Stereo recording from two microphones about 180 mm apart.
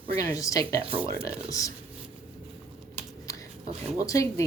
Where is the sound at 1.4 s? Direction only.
20° left (ahead or behind).